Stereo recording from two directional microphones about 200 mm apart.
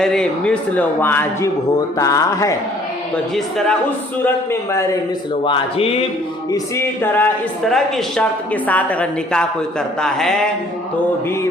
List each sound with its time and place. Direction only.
0.0 s a woman's voice: 5° left (ahead or behind)
3.3 s speech: centre (ahead or behind)
5.5 s music: 30° left (ahead or behind)
6.5 s a woman's voice: 10° left (ahead or behind)